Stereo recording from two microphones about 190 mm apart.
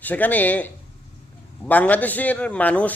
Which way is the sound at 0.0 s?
10° left (ahead or behind).